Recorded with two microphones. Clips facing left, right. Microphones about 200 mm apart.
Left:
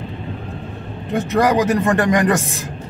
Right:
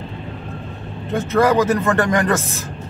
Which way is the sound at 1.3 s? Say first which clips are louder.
Right 1 dB; 15° left (ahead or behind).